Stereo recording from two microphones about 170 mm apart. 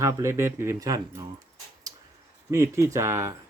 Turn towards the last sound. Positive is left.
turn(degrees=-15)  # may be behind; listen again after turning